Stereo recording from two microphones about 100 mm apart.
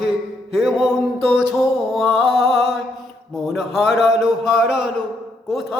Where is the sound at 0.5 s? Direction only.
5° right (ahead or behind).